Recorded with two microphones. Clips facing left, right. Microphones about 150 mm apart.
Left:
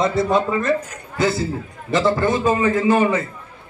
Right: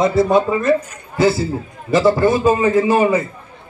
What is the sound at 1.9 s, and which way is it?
Speech, 5° right (ahead or behind).